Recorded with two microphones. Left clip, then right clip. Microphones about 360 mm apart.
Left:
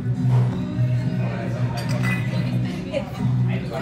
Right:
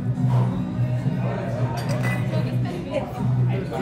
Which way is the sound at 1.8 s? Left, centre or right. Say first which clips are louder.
Left 1 dB; right.